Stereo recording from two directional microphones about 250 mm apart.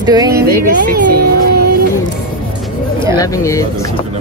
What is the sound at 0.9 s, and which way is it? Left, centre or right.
Speech, right.